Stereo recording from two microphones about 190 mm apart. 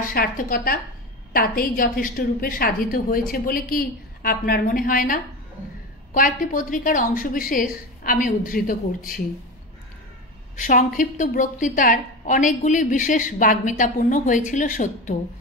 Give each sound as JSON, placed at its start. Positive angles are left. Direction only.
{"t": 0.0, "sound": "a woman's voice", "side_deg": 50}
{"t": 10.5, "sound": "a woman's voice", "side_deg": 40}